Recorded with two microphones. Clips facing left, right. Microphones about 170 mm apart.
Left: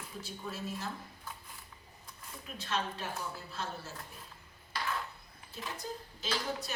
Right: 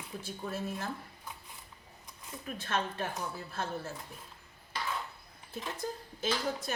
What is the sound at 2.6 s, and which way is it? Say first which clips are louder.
A woman's voice: right 2 dB; 55° right (ahead or behind).